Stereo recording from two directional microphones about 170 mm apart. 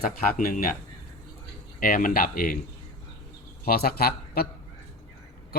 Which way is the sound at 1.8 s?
55° left (ahead or behind).